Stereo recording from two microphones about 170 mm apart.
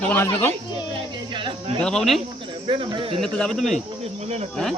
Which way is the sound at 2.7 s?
30° right (ahead or behind).